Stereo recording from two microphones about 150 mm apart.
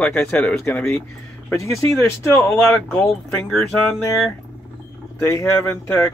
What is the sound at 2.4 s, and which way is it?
Speech, 10° left (ahead or behind).